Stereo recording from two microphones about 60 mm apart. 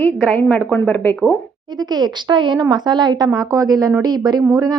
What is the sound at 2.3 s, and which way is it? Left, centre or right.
Speech, right.